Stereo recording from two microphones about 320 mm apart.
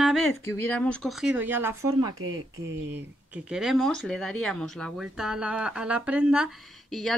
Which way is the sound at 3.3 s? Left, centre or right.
Centre.